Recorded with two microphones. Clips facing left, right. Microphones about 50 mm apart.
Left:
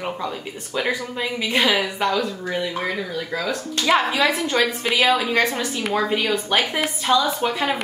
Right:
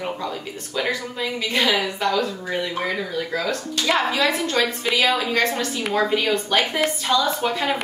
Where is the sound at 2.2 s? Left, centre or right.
Centre.